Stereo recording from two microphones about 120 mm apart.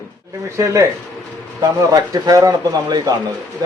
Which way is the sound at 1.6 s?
30° right (ahead or behind).